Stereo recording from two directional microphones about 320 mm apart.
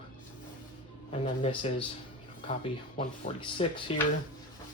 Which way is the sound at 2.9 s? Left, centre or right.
Centre.